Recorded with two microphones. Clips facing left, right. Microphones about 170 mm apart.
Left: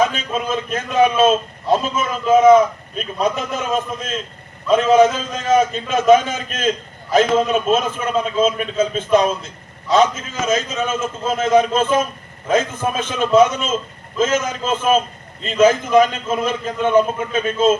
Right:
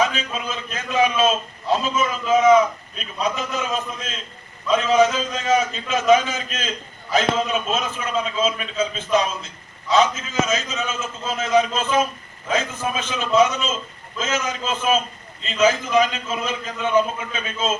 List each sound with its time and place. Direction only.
0.0 s a man's voice: 50° left (ahead or behind)
4.7 s a man's voice: 50° left (ahead or behind)